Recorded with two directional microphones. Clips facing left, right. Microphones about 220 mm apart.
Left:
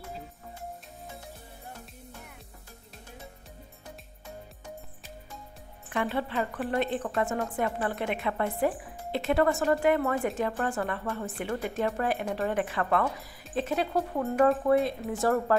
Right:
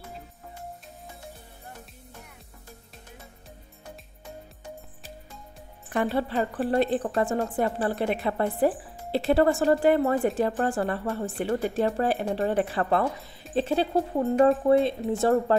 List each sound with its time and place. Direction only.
5.9 s speech: 40° right (ahead or behind)